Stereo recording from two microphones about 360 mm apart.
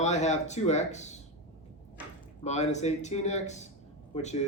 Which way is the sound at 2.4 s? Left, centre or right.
Centre.